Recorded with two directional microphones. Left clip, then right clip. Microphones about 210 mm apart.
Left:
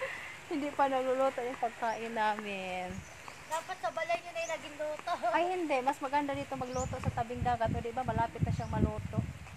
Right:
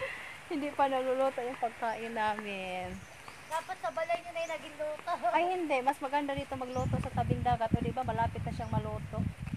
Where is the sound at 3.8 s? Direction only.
45° left (ahead or behind).